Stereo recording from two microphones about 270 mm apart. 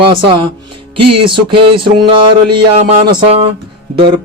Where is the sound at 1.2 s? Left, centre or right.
Centre.